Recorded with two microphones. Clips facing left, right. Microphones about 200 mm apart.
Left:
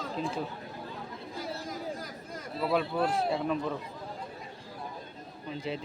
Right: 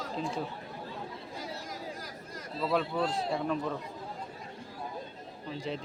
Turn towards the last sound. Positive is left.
turn(degrees=0)  # may be behind; listen again after turning